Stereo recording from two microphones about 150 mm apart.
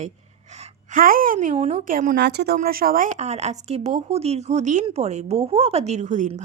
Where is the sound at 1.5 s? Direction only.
45° right (ahead or behind).